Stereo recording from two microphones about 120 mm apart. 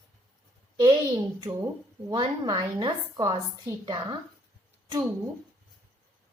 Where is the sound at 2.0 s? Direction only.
40° right (ahead or behind).